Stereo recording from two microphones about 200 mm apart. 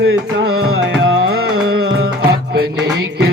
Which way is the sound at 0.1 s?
90° right.